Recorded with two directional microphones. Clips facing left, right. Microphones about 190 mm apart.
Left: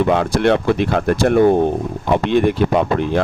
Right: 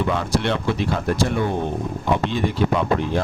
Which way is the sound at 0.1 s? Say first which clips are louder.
Left 7 dB; 60° left (ahead or behind).